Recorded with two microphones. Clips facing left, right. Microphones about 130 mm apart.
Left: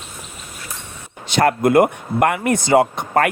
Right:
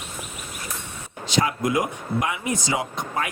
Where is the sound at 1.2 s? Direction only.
60° left (ahead or behind).